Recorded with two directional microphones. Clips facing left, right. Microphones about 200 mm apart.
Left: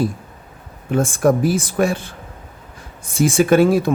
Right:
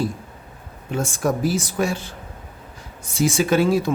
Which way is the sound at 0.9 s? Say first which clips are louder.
Left 7 dB; 55° left (ahead or behind).